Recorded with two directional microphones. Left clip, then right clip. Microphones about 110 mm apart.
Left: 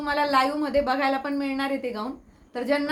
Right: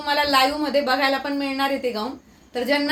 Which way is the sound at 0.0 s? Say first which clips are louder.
Right 3 dB; 35° left (ahead or behind).